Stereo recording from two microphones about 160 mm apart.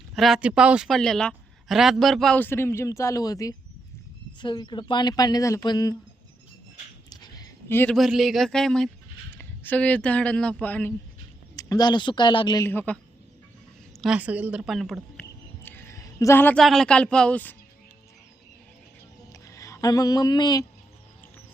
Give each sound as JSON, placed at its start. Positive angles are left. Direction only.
{"t": 0.2, "sound": "speech", "side_deg": -5}
{"t": 7.1, "sound": "a sound", "side_deg": 25}
{"t": 7.7, "sound": "speech", "side_deg": 15}
{"t": 7.9, "sound": "speech", "side_deg": 0}
{"t": 11.5, "sound": "speech", "side_deg": 25}
{"t": 12.6, "sound": "speech", "side_deg": 10}
{"t": 14.0, "sound": "a sound", "side_deg": -5}
{"t": 16.6, "sound": "speech", "side_deg": 5}
{"t": 19.3, "sound": "a sound", "side_deg": 20}